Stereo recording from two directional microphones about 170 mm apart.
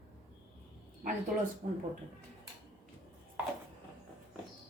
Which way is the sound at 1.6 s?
55° right (ahead or behind).